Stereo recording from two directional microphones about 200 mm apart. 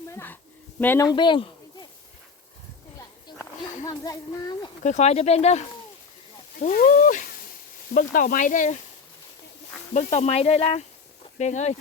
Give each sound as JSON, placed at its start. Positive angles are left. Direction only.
{"t": 0.1, "sound": "a woman's voice", "side_deg": 10}
{"t": 3.8, "sound": "speech", "side_deg": 15}
{"t": 4.8, "sound": "speech", "side_deg": 35}
{"t": 9.9, "sound": "speech", "side_deg": 35}